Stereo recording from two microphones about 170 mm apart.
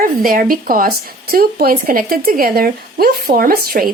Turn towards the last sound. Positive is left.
turn(degrees=-60)  # may be behind; listen again after turning